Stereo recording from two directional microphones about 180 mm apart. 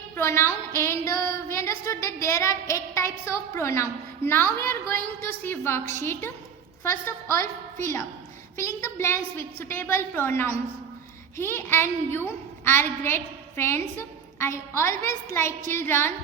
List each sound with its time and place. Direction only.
0.2 s a sound: 15° left (ahead or behind)
2.2 s a woman's voice: 15° left (ahead or behind)
8.5 s a woman's voice: 15° left (ahead or behind)